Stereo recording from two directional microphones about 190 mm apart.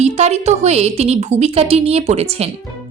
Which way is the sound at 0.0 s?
35° right (ahead or behind).